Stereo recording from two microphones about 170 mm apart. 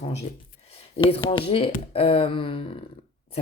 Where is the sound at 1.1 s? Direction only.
35° left (ahead or behind).